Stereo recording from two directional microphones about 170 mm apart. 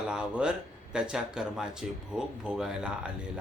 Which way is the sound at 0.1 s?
5° right (ahead or behind).